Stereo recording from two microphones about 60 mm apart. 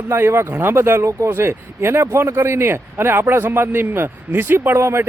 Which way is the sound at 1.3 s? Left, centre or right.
Right.